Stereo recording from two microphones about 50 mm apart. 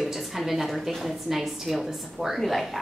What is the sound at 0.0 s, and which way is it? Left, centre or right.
A woman's voice, centre.